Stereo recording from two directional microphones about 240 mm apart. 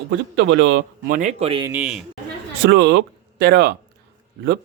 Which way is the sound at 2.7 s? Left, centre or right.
Right.